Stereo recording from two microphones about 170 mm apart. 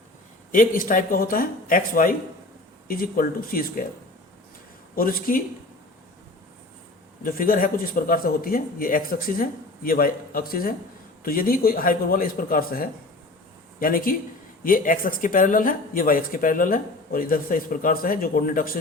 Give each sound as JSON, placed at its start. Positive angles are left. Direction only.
{"t": 0.5, "sound": "speech", "side_deg": 55}
{"t": 4.9, "sound": "speech", "side_deg": 60}
{"t": 7.2, "sound": "speech", "side_deg": 55}